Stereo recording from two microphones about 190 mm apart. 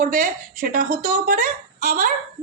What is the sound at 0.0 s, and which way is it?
A woman's voice, 50° right (ahead or behind).